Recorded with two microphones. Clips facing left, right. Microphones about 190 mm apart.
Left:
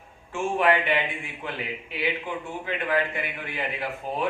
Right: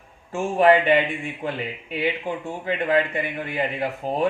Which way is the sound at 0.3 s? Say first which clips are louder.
Right 6 dB; 40° right (ahead or behind).